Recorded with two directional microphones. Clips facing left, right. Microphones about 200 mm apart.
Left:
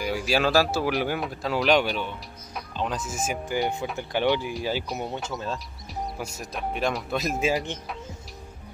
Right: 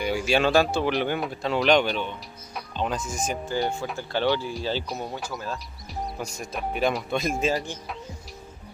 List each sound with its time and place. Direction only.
0.0 s speech: centre (ahead or behind); by 5.6 s 25° left (ahead or behind)
6.1 s speech: 5° left (ahead or behind)